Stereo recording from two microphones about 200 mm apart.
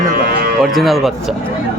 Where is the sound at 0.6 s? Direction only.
Centre (ahead or behind).